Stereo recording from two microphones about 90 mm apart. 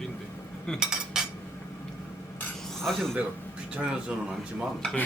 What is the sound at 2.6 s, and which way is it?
Cutlery, 5° left (ahead or behind).